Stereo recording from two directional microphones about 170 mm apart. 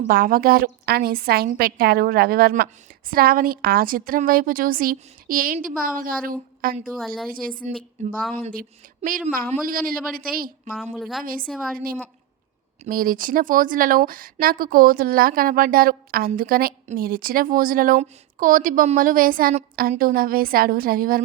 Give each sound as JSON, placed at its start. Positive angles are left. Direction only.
{"t": 0.1, "sound": "a woman's voice", "side_deg": -55}
{"t": 6.9, "sound": "a woman's voice", "side_deg": 5}
{"t": 7.3, "sound": "a woman's voice", "side_deg": -55}
{"t": 7.6, "sound": "a woman's voice", "side_deg": 0}
{"t": 9.0, "sound": "a woman's voice", "side_deg": -45}
{"t": 10.9, "sound": "a woman's voice", "side_deg": 0}
{"t": 12.8, "sound": "a woman's voice", "side_deg": -55}